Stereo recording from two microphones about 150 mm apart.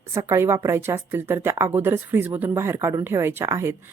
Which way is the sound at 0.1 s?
20° right (ahead or behind).